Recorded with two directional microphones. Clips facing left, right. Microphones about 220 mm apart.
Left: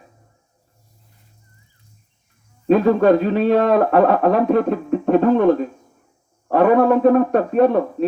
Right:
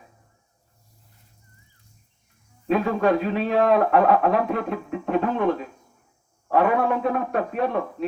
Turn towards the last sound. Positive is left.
turn(degrees=40)  # may be behind; listen again after turning